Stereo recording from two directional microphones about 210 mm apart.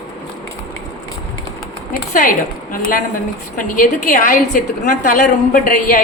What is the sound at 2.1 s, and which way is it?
A woman's voice, 40° left (ahead or behind).